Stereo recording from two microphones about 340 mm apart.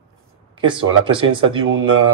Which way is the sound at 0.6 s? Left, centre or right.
Centre.